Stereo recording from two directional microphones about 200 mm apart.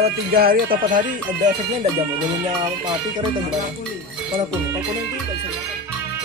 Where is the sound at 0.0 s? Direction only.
50° right (ahead or behind).